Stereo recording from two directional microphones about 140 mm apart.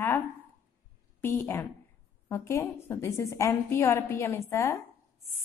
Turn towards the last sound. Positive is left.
turn(degrees=20)  # may be behind; listen again after turning